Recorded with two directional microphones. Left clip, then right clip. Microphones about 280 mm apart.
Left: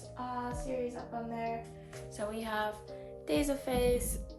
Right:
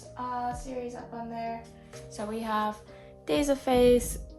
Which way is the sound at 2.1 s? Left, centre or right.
Centre.